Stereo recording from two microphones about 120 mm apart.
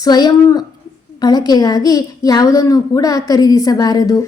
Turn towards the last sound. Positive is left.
turn(degrees=30)  # may be behind; listen again after turning